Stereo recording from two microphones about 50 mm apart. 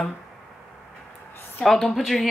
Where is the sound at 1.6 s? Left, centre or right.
Centre.